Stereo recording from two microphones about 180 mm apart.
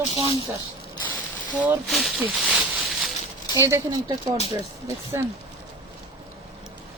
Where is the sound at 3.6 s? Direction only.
15° right (ahead or behind).